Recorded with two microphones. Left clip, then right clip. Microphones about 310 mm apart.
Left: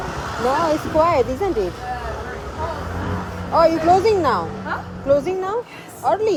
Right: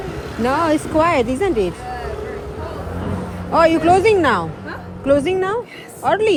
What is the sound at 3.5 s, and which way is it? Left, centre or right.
Speech, right.